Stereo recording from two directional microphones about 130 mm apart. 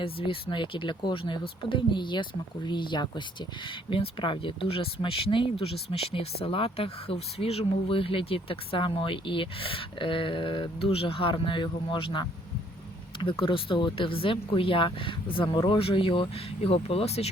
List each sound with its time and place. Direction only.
0.0 s speech: 45° left (ahead or behind)